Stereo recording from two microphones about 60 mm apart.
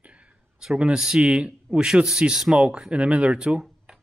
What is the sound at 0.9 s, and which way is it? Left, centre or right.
Speech, centre.